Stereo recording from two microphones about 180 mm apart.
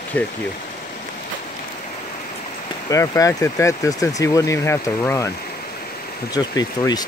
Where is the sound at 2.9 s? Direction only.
20° left (ahead or behind).